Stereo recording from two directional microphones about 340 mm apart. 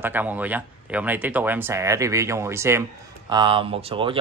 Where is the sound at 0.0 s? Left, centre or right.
Centre.